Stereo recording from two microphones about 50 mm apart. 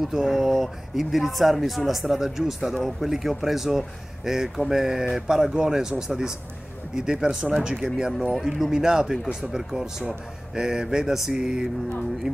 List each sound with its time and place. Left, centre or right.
0.0 s speech: centre
8.2 s speech: centre